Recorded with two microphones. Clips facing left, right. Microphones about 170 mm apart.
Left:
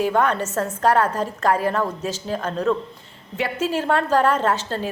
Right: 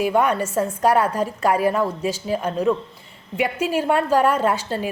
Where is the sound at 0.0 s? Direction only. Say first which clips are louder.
Right 1 dB; 10° right (ahead or behind).